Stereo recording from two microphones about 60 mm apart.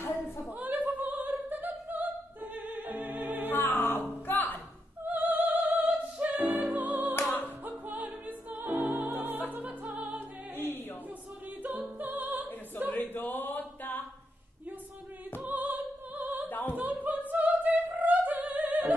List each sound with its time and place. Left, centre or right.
0.6 s opera: right
3.6 s music: left
5.0 s opera: right
6.4 s music: right
7.2 s music: left
7.4 s music: right
12.0 s opera: right
12.9 s a sound: left
15.4 s opera: right
16.4 s opera: left
16.7 s a sound: right
17.3 s opera: right